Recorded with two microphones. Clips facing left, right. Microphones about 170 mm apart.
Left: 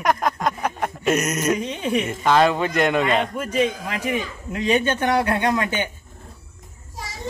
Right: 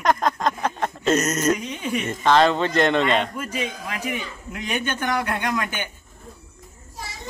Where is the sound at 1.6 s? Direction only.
25° left (ahead or behind).